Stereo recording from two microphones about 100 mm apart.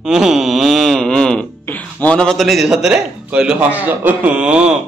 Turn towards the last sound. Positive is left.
turn(degrees=-10)  # may be behind; listen again after turning